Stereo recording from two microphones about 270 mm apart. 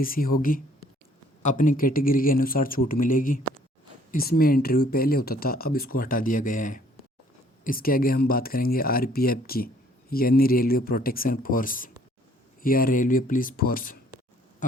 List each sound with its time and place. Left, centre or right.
0.0 s speech: left
1.4 s speech: left